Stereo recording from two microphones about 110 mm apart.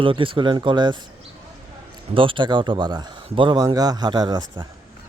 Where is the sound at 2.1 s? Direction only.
50° right (ahead or behind).